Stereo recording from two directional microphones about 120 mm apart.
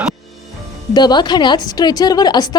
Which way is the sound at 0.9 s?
40° left (ahead or behind).